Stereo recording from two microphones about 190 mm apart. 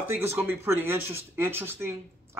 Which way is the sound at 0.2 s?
10° right (ahead or behind).